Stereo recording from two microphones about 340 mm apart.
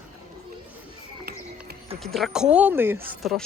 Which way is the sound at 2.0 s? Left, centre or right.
Centre.